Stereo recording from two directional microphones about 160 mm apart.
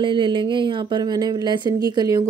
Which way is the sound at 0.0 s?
30° right (ahead or behind).